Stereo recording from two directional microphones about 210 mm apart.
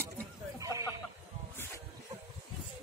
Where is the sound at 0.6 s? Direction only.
15° right (ahead or behind).